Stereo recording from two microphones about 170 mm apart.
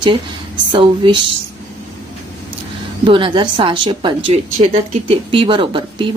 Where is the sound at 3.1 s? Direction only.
30° right (ahead or behind).